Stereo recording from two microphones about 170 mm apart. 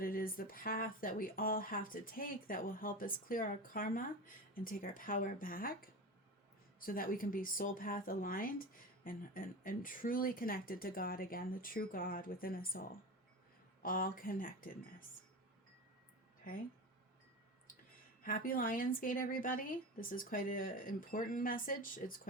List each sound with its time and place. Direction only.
0.0 s speech: 60° left (ahead or behind)
18.2 s speech: 55° left (ahead or behind)